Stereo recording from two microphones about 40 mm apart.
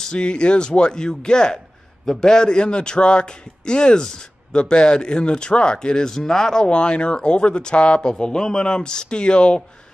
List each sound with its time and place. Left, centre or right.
0.0 s a man's voice: left